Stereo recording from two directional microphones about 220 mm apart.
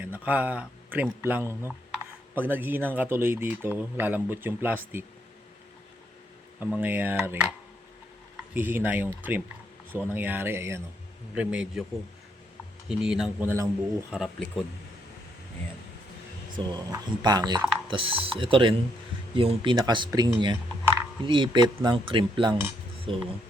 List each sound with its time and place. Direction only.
0.0 s speech: 5° right (ahead or behind)
6.6 s speech: 10° right (ahead or behind)
8.5 s speech: 10° right (ahead or behind)
12.9 s speech: 5° right (ahead or behind)
14.1 s speech: centre (ahead or behind)
16.6 s speech: 20° right (ahead or behind)